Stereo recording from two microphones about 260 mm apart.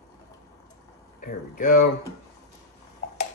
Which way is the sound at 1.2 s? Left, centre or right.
Left.